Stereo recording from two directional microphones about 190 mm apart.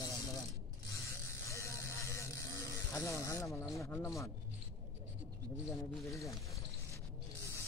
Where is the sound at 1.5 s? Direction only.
15° left (ahead or behind).